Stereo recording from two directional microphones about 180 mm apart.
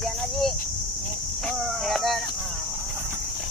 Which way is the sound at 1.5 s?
Centre (ahead or behind).